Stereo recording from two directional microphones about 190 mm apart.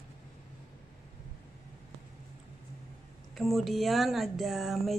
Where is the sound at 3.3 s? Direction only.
Centre (ahead or behind).